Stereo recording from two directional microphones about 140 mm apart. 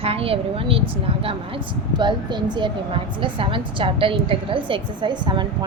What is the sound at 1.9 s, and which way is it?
A woman's voice, 35° right (ahead or behind).